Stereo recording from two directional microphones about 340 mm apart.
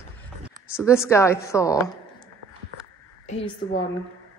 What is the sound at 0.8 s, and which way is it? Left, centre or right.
A woman's voice, centre.